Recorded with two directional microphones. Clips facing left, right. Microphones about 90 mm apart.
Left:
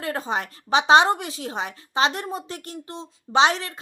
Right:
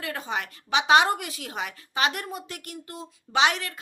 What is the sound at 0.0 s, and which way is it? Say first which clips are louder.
A woman's voice: left 4 dB; 35° left (ahead or behind).